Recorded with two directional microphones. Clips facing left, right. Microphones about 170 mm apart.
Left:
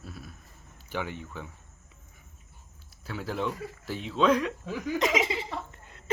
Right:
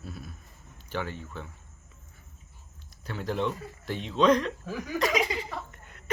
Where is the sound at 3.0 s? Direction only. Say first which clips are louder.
Right 2 dB; 5° left (ahead or behind).